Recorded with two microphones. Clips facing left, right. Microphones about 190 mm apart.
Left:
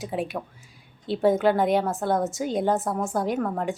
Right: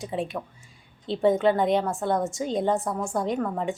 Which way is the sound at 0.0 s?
Centre (ahead or behind).